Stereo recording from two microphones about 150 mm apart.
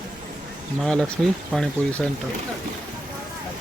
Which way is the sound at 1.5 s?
5° left (ahead or behind).